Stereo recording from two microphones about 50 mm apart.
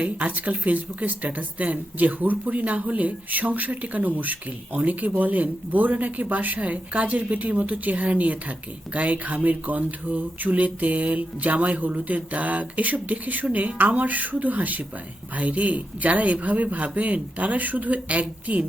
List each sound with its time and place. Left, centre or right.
0.0 s speech: right